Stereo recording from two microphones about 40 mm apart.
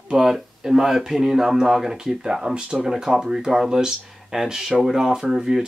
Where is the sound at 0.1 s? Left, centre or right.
Centre.